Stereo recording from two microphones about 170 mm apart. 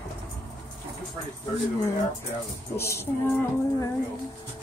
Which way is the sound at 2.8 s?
15° left (ahead or behind).